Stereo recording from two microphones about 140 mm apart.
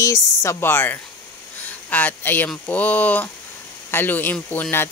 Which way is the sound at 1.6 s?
10° left (ahead or behind).